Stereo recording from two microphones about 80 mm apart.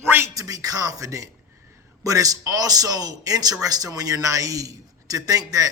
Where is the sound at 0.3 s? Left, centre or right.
Right.